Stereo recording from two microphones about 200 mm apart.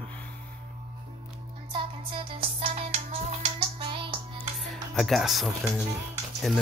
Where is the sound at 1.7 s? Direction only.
25° right (ahead or behind).